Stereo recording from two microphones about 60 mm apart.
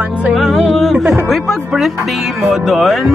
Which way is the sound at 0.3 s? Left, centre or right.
Centre.